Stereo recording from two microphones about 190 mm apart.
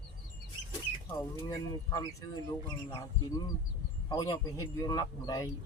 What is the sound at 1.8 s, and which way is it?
Speech, 15° left (ahead or behind).